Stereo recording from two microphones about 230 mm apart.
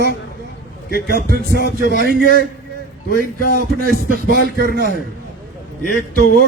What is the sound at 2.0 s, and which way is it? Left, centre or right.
Music, right.